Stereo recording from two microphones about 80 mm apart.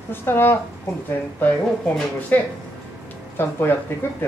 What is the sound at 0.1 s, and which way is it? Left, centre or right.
Speech, left.